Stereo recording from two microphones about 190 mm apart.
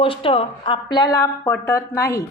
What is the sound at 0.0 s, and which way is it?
A woman's voice, 30° left (ahead or behind).